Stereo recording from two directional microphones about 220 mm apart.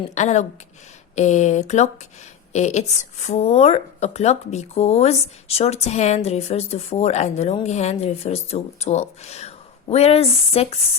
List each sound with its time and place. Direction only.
0.1 s a woman's voice: 30° left (ahead or behind)